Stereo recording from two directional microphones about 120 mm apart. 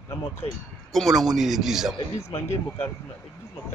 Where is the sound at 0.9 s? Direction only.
Centre (ahead or behind).